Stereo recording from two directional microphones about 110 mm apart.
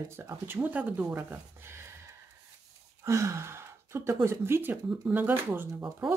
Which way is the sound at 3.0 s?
25° right (ahead or behind).